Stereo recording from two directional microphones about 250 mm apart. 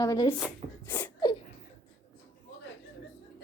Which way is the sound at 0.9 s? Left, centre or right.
Centre.